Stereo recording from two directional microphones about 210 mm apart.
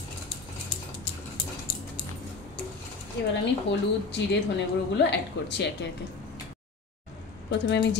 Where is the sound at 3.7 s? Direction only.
55° left (ahead or behind).